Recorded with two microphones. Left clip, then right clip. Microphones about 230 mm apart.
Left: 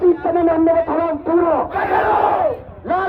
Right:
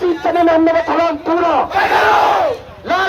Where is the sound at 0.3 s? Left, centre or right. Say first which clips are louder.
Right 3 dB; right.